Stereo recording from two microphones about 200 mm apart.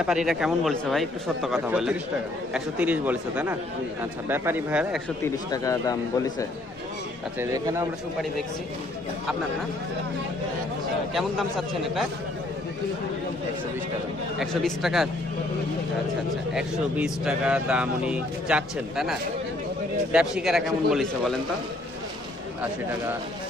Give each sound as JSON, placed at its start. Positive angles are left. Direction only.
{"t": 0.0, "sound": "speech", "side_deg": -5}
{"t": 5.2, "sound": "speech", "side_deg": 15}
{"t": 7.3, "sound": "speech", "side_deg": -15}
{"t": 11.1, "sound": "speech", "side_deg": 0}
{"t": 14.3, "sound": "speech", "side_deg": 0}
{"t": 16.6, "sound": "speech", "side_deg": -5}
{"t": 20.1, "sound": "speech", "side_deg": 0}